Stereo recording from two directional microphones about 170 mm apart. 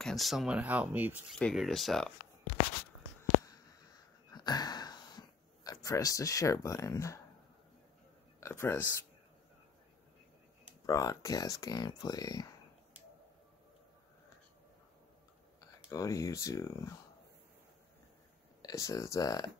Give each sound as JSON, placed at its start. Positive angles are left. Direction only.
{"t": 0.0, "sound": "speech", "side_deg": 0}
{"t": 3.2, "sound": "a sound", "side_deg": 20}
{"t": 8.4, "sound": "speech", "side_deg": 15}
{"t": 10.9, "sound": "speech", "side_deg": 20}
{"t": 15.6, "sound": "speech", "side_deg": 20}
{"t": 18.6, "sound": "speech", "side_deg": 20}